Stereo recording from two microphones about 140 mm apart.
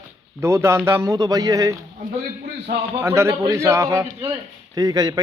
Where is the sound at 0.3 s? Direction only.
20° right (ahead or behind).